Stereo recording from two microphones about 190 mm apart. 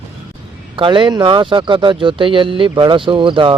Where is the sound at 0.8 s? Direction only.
25° right (ahead or behind).